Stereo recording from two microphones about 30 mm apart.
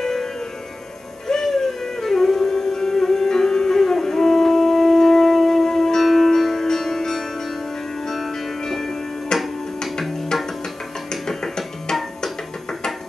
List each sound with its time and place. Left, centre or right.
0.0 s music: centre
2.4 s music: centre
9.3 s music: left
10.3 s music: centre
11.2 s music: centre